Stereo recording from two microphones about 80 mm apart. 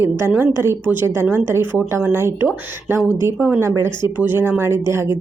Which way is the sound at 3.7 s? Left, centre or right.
Right.